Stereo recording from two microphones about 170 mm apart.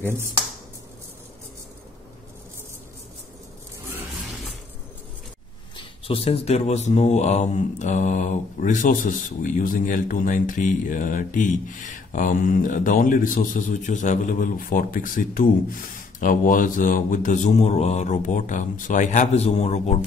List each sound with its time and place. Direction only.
5.8 s speech: 35° left (ahead or behind)